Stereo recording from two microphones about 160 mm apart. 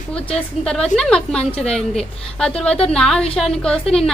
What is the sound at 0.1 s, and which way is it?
A woman's voice, 5° left (ahead or behind).